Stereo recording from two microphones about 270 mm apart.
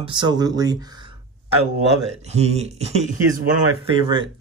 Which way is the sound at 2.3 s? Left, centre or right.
Right.